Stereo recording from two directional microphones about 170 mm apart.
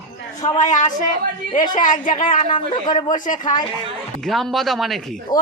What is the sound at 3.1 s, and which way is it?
Speech, 50° left (ahead or behind).